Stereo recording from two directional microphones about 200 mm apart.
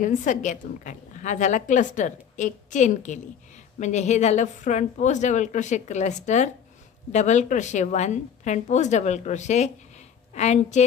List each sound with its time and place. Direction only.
0.0 s a woman's voice: 40° left (ahead or behind)